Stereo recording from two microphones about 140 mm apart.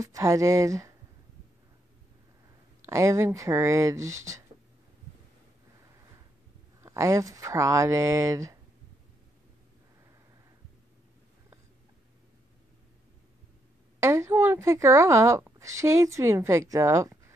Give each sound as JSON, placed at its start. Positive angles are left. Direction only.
{"t": 0.0, "sound": "speech", "side_deg": -25}
{"t": 2.9, "sound": "speech", "side_deg": -20}
{"t": 6.8, "sound": "speech", "side_deg": -20}
{"t": 13.9, "sound": "speech", "side_deg": -20}